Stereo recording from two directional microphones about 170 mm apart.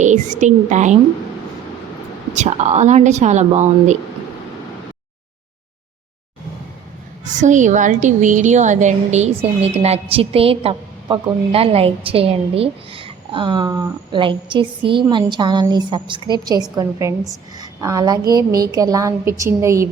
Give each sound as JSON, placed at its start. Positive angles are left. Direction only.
{"t": 0.0, "sound": "speech", "side_deg": -45}
{"t": 2.3, "sound": "speech", "side_deg": -45}
{"t": 7.3, "sound": "a woman's voice", "side_deg": -45}